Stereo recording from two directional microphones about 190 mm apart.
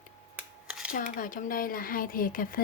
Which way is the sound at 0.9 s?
45° left (ahead or behind).